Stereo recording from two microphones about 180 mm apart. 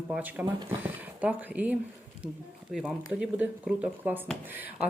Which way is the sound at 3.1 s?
5° right (ahead or behind).